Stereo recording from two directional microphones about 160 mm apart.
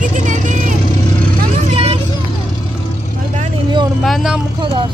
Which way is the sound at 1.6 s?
40° right (ahead or behind).